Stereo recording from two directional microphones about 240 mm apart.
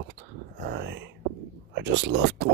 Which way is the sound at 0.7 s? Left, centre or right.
Right.